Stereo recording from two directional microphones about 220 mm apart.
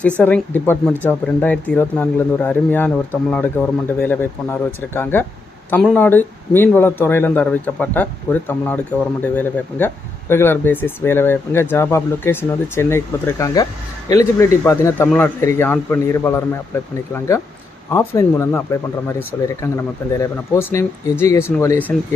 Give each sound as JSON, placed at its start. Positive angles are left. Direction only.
{"t": 0.0, "sound": "speech", "side_deg": 5}
{"t": 17.9, "sound": "speech", "side_deg": 10}
{"t": 20.5, "sound": "speech", "side_deg": 10}